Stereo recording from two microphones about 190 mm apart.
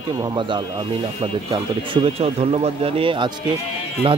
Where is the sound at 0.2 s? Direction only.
25° right (ahead or behind).